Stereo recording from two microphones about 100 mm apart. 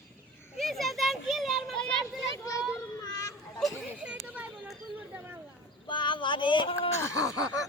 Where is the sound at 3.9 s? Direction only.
15° right (ahead or behind).